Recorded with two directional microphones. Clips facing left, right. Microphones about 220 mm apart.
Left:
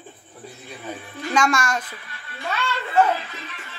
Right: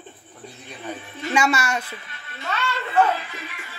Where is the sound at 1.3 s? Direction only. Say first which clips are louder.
Even; 10° right (ahead or behind).